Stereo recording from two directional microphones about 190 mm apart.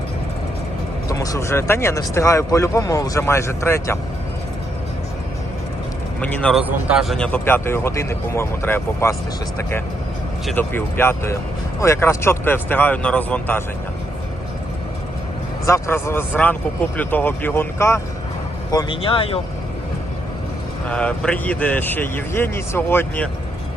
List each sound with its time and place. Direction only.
1.0 s speech: 20° left (ahead or behind)
6.1 s speech: 5° left (ahead or behind)
6.7 s speech: 5° right (ahead or behind); by 9.1 s 15° left (ahead or behind)
10.5 s speech: 10° left (ahead or behind)
15.6 s speech: 15° left (ahead or behind)
20.9 s speech: 5° left (ahead or behind)